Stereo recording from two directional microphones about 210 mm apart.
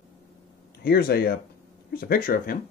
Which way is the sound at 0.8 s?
45° left (ahead or behind).